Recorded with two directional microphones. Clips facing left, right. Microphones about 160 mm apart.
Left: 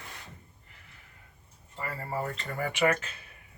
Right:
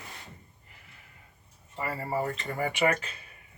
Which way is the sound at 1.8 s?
15° right (ahead or behind).